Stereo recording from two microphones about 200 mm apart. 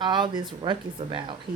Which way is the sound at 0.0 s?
20° right (ahead or behind).